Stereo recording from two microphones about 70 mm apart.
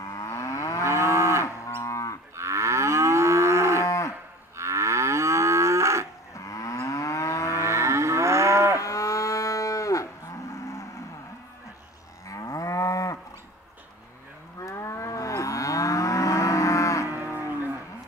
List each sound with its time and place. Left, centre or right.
0.0 s moo: left
0.8 s moo: right
1.4 s moo: left
2.3 s moo: right
3.8 s moo: left
4.6 s moo: right
6.3 s moo: left
7.5 s livestock: right
8.7 s cattle: left
12.3 s moo: left
14.6 s moo: left